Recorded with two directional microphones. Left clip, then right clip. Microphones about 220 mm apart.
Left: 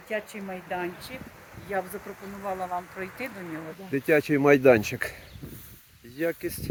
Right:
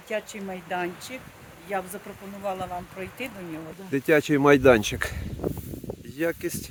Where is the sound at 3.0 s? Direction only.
60° right (ahead or behind).